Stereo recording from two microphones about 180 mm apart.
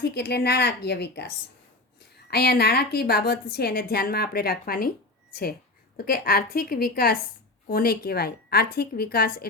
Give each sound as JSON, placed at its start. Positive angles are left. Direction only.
{"t": 0.0, "sound": "a woman's voice", "side_deg": 65}
{"t": 2.3, "sound": "a woman's voice", "side_deg": 60}